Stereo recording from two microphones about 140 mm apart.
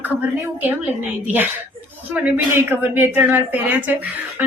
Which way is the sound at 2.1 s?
10° right (ahead or behind).